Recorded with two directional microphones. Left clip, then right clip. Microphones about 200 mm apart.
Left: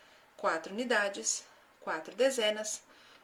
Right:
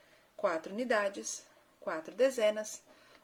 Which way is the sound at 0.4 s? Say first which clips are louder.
Left 1 dB; 20° right (ahead or behind).